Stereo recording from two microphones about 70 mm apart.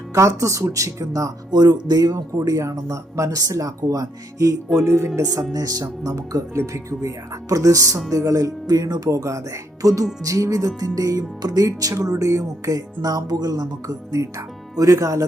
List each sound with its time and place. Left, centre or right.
0.1 s speech: right
1.5 s speech: right
4.8 s speech: right
5.5 s speech: right
7.5 s speech: right
8.6 s speech: right